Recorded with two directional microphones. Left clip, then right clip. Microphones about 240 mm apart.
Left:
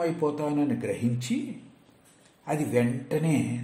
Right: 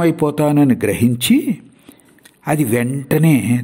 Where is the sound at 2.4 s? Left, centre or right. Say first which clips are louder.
Right 9 dB; right.